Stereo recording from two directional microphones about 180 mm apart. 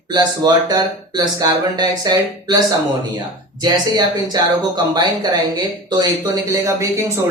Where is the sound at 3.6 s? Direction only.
25° right (ahead or behind).